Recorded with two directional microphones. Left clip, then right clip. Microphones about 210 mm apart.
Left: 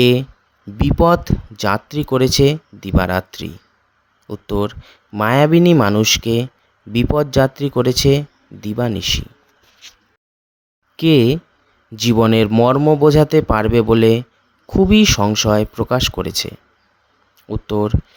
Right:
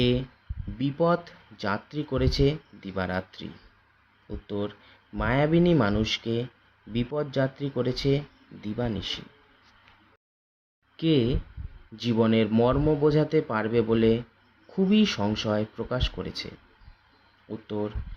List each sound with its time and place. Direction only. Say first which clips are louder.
0.0 s speech: left 12 dB; 55° left (ahead or behind)
10.9 s speech: left 11 dB; 50° left (ahead or behind)